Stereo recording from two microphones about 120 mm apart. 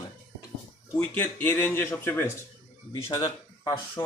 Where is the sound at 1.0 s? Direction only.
15° left (ahead or behind).